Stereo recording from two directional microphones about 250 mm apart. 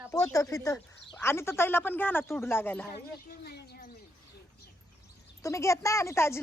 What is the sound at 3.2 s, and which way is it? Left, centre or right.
Speech, left.